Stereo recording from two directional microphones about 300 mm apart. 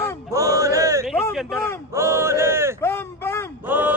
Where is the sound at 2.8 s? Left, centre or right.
Centre.